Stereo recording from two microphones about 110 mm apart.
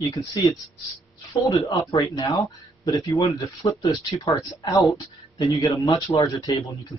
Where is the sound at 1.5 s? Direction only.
30° left (ahead or behind).